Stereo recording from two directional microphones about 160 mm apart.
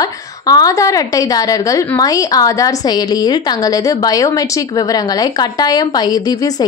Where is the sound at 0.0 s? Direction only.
25° left (ahead or behind).